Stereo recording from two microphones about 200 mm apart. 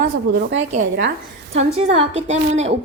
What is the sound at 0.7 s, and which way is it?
A woman's voice, 40° right (ahead or behind).